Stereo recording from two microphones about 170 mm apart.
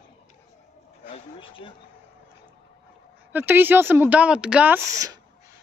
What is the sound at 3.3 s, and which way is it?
Speech, 10° right (ahead or behind).